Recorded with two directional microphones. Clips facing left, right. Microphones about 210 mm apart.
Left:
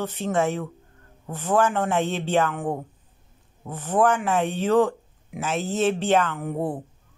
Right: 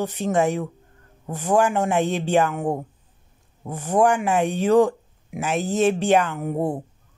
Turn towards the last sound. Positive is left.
turn(degrees=-15)  # may be behind; listen again after turning